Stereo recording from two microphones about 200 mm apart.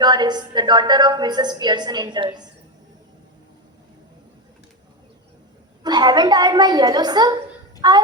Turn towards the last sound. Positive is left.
turn(degrees=-20)  # may be behind; listen again after turning